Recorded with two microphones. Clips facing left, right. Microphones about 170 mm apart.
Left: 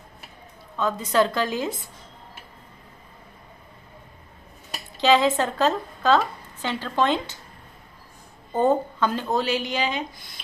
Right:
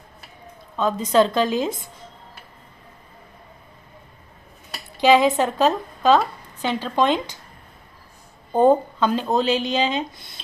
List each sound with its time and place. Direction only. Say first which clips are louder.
0.8 s speech: right 4 dB; 20° right (ahead or behind)
4.9 s a woman's voice: right 3 dB; 15° right (ahead or behind)
8.5 s speech: right 5 dB; 15° right (ahead or behind)